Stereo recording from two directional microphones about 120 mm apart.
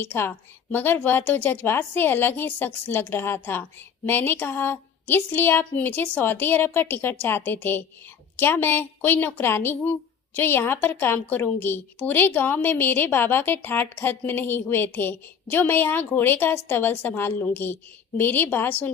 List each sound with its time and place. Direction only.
0.0 s a woman's voice: 20° left (ahead or behind)